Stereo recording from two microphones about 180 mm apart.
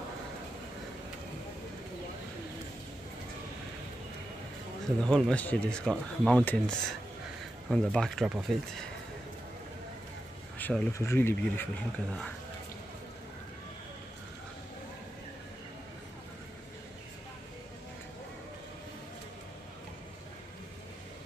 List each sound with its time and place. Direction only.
5.0 s speech: 5° left (ahead or behind)
10.6 s speech: 10° left (ahead or behind)